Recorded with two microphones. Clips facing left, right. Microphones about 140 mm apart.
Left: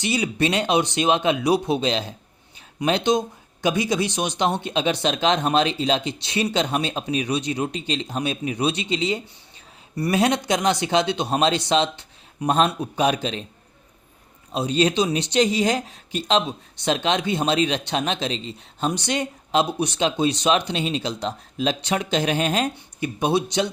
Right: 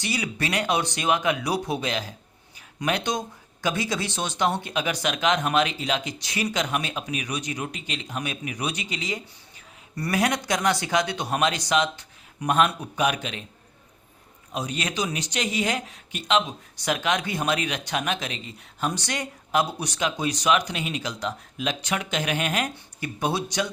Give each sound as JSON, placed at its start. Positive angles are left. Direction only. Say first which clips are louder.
{"t": 0.0, "sound": "speech", "louder": "left 6 dB", "side_deg": 20}
{"t": 14.5, "sound": "speech", "louder": "left 9 dB", "side_deg": 30}